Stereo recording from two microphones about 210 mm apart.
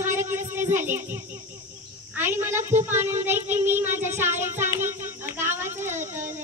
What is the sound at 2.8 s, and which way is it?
Child singing, 10° right (ahead or behind).